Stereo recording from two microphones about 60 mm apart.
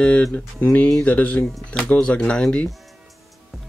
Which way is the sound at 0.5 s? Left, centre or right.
Left.